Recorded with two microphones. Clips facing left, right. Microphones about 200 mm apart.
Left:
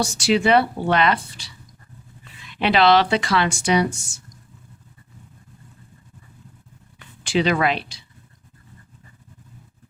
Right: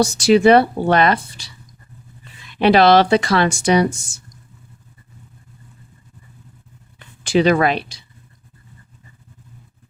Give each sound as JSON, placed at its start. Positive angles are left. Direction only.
{"t": 0.0, "sound": "a woman's voice", "side_deg": -40}
{"t": 2.6, "sound": "a woman's voice", "side_deg": -40}
{"t": 7.3, "sound": "speech", "side_deg": -45}